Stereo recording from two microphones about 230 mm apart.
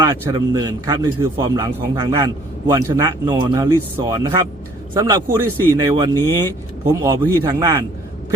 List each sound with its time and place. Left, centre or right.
0.0 s speech: centre